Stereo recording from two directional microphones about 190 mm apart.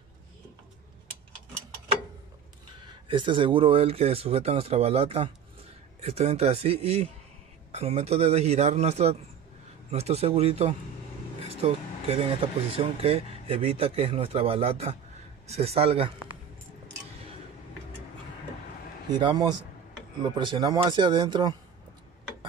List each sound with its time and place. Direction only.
3.1 s speech: 25° right (ahead or behind)
19.0 s speech: 20° right (ahead or behind)